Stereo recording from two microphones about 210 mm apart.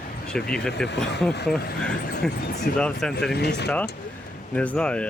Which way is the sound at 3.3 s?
50° left (ahead or behind).